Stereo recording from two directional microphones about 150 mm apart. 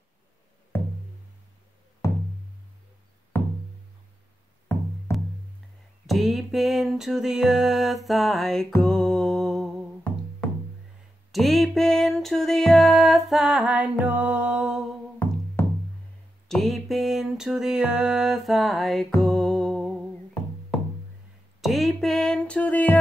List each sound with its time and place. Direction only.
0.7 s music: 15° left (ahead or behind)
2.0 s music: 20° left (ahead or behind)
3.3 s music: 10° left (ahead or behind)
4.7 s music: 15° left (ahead or behind)
6.0 s music: centre (ahead or behind)
15.2 s music: 10° left (ahead or behind)
16.4 s a sound: centre (ahead or behind)
19.2 s music: 5° left (ahead or behind)
21.5 s speech: centre (ahead or behind)